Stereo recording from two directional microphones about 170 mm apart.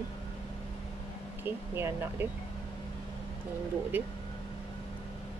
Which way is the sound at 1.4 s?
15° right (ahead or behind).